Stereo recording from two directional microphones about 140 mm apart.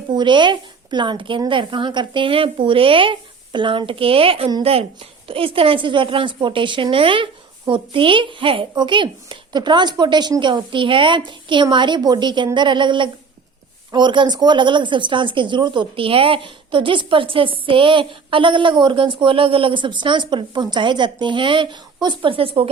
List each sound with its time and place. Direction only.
0.2 s a woman's voice: 35° right (ahead or behind)